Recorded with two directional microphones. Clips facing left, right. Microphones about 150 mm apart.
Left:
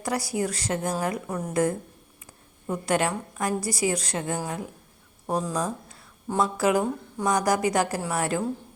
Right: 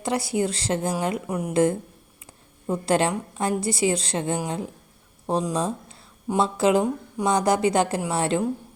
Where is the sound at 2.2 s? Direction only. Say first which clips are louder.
Right 3 dB; 30° right (ahead or behind).